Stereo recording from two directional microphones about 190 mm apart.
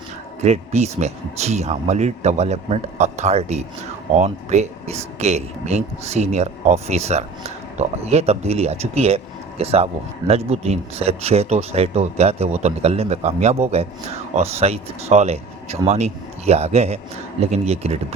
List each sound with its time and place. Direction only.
0.4 s speech: 35° right (ahead or behind)